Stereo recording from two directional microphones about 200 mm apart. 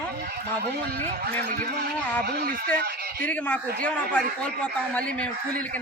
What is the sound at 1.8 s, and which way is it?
Speech, 55° right (ahead or behind).